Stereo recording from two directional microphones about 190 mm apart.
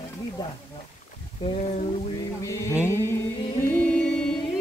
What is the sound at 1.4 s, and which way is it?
Speech, 35° left (ahead or behind).